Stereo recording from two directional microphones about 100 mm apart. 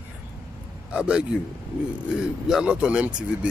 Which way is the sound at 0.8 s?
10° right (ahead or behind).